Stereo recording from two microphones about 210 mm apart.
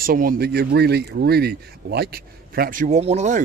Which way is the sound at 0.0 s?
45° right (ahead or behind).